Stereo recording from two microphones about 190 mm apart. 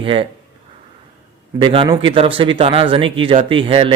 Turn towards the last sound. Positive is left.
turn(degrees=-30)  # may be behind; listen again after turning